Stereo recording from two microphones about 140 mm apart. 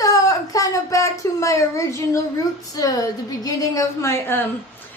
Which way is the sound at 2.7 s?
25° left (ahead or behind).